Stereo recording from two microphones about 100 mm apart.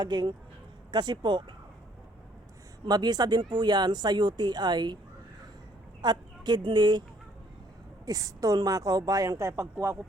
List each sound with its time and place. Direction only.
0.0 s speech: 45° right (ahead or behind)
2.8 s speech: 45° right (ahead or behind)
6.0 s speech: 45° right (ahead or behind)
8.0 s a woman's voice: 40° right (ahead or behind)